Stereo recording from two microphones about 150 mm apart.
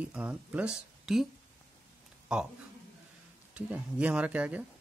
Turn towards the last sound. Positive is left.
turn(degrees=-10)  # may be behind; listen again after turning